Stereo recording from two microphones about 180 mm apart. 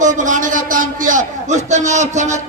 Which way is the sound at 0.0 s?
45° right (ahead or behind).